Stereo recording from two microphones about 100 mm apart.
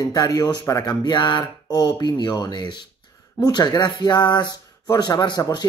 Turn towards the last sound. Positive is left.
turn(degrees=45)  # may be behind; listen again after turning